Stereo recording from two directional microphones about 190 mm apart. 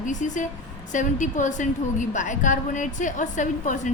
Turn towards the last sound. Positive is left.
turn(degrees=40)  # may be behind; listen again after turning